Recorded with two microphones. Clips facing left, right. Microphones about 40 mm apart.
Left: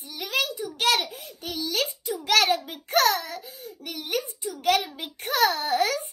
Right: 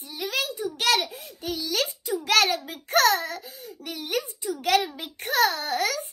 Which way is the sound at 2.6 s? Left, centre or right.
Centre.